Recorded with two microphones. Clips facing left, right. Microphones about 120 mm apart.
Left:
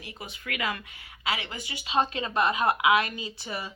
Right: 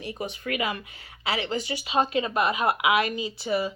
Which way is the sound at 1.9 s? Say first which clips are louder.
Right 2 dB; 15° right (ahead or behind).